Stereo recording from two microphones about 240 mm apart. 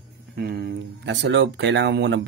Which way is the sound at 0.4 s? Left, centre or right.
Right.